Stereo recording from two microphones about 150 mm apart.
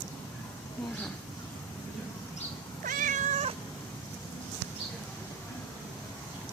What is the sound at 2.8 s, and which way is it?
Cat, 60° right (ahead or behind).